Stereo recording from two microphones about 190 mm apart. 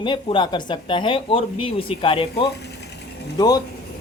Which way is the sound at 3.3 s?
20° left (ahead or behind).